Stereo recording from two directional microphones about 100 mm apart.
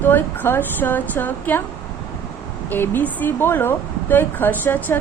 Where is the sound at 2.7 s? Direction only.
20° left (ahead or behind).